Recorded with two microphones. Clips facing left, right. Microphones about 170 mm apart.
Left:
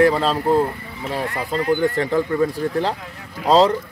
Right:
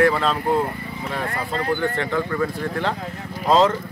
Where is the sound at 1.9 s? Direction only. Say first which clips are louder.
Left 4 dB; 35° left (ahead or behind).